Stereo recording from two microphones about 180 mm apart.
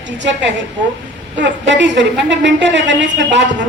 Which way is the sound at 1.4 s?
75° right (ahead or behind).